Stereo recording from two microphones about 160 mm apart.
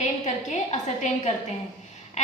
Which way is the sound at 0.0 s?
45° left (ahead or behind).